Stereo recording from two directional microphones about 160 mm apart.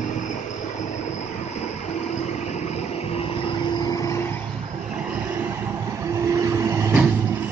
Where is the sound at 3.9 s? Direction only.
20° left (ahead or behind).